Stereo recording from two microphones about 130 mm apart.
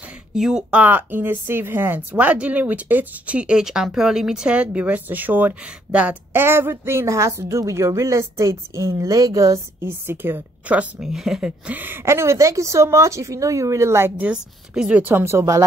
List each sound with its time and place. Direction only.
0.3 s speech: 5° right (ahead or behind); by 15.6 s 20° right (ahead or behind)